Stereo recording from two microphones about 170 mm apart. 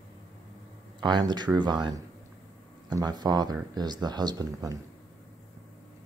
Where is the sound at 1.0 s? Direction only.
25° right (ahead or behind).